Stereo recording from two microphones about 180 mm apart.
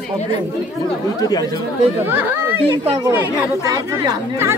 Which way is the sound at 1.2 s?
20° left (ahead or behind).